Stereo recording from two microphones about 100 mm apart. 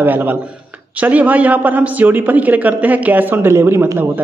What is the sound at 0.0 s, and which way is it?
A man's voice, 20° right (ahead or behind).